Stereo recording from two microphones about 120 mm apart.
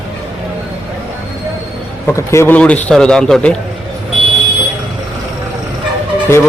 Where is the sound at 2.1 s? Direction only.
25° left (ahead or behind); by 3.5 s 5° left (ahead or behind).